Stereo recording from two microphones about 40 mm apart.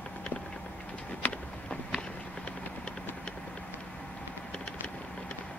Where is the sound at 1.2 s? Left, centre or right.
Left.